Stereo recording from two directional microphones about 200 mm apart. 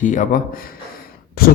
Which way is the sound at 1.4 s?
50° left (ahead or behind).